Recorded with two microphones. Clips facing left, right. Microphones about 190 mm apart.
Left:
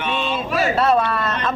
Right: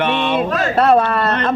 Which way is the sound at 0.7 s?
55° right (ahead or behind).